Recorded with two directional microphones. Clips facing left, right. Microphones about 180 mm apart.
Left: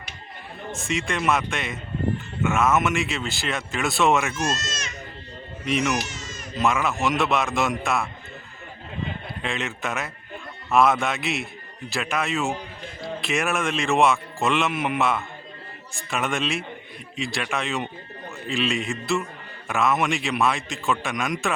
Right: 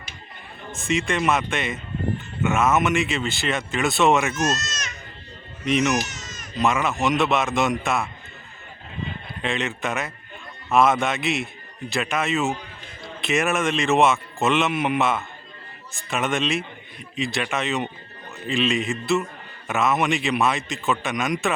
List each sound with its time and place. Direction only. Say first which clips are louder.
0.7 s speech: right 3 dB; centre (ahead or behind)
4.4 s speech: right 2 dB; 30° left (ahead or behind)
5.6 s speech: right 3 dB; centre (ahead or behind)
6.1 s baby cry: left 2 dB; 30° left (ahead or behind)
6.6 s speech: right 1 dB; centre (ahead or behind)
9.4 s speech: right 4 dB; centre (ahead or behind)